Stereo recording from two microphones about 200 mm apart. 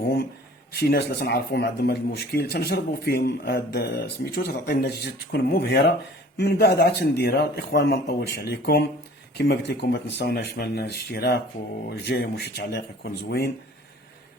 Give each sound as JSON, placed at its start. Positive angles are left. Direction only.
{"t": 0.0, "sound": "a man's voice", "side_deg": 50}